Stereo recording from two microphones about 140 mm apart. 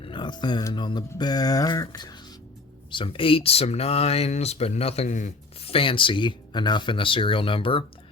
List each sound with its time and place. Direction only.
0.0 s speech: 35° left (ahead or behind)
2.9 s speech: 40° left (ahead or behind); by 5.3 s 60° left (ahead or behind)
5.5 s speech: 45° left (ahead or behind)